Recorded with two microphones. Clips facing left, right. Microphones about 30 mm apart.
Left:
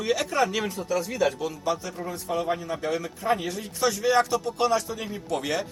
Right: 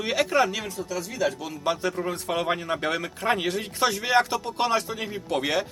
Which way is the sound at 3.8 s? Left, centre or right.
Right.